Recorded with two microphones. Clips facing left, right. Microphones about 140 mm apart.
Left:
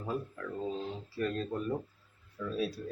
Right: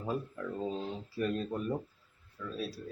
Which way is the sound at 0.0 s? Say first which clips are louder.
Right 1 dB; 15° right (ahead or behind).